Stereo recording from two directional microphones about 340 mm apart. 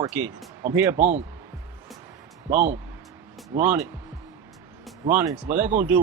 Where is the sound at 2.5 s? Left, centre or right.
Right.